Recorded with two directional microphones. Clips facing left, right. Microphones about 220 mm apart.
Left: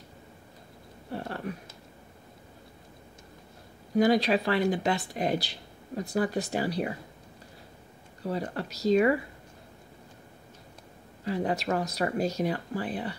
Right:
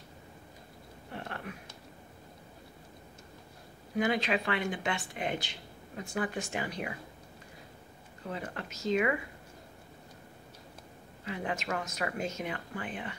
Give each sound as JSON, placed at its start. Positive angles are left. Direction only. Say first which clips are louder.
{"t": 1.1, "sound": "a sound", "louder": "left 7 dB", "side_deg": 35}
{"t": 3.9, "sound": "speech", "louder": "left 7 dB", "side_deg": 35}
{"t": 8.2, "sound": "speech", "louder": "left 7 dB", "side_deg": 35}
{"t": 11.2, "sound": "speech", "louder": "left 7 dB", "side_deg": 35}